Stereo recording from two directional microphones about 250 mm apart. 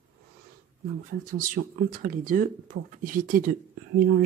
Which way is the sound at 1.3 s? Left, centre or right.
Right.